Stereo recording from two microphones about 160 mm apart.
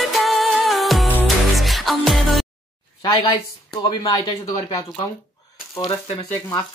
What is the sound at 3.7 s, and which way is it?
Speech, 25° left (ahead or behind).